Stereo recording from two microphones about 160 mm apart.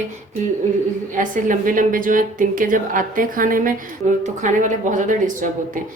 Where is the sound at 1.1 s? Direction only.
55° right (ahead or behind).